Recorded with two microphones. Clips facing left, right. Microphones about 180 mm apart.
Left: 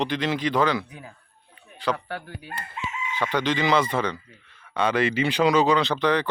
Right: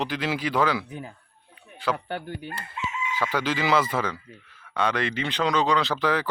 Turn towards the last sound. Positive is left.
turn(degrees=-5)  # may be behind; listen again after turning